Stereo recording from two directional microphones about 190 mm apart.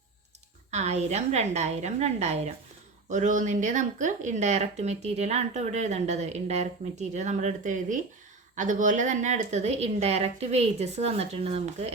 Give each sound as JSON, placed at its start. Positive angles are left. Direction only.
{"t": 0.7, "sound": "speech", "side_deg": -35}